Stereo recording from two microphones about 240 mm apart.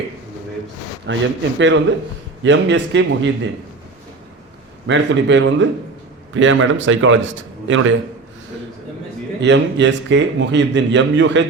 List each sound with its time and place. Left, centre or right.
1.1 s a man's voice: right
4.9 s a man's voice: right
9.4 s a man's voice: right